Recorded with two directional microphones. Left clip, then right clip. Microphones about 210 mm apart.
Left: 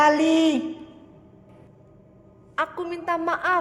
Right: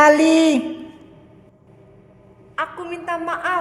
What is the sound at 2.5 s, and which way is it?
A woman's voice, 35° left (ahead or behind).